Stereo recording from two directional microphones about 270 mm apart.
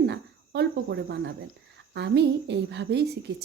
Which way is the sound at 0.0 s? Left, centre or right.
Right.